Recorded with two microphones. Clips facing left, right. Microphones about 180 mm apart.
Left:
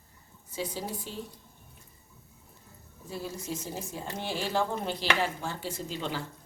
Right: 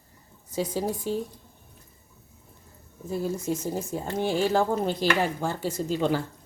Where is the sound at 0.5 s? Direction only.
45° right (ahead or behind).